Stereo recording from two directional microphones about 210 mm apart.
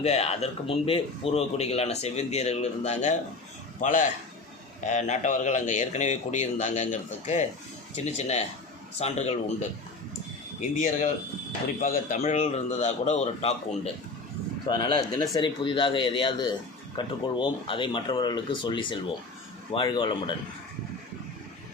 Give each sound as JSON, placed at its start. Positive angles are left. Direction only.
{"t": 0.0, "sound": "speech", "side_deg": 30}